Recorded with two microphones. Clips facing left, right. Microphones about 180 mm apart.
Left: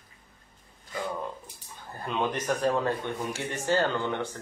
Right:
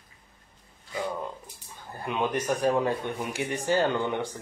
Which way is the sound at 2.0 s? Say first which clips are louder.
Right 1 dB; 10° right (ahead or behind).